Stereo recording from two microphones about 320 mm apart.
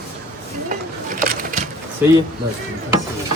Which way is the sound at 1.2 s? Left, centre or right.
Right.